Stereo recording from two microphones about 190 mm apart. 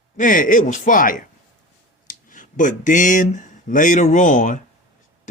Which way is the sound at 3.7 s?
45° left (ahead or behind).